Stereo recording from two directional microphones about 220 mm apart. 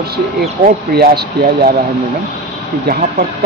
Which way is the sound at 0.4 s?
45° right (ahead or behind).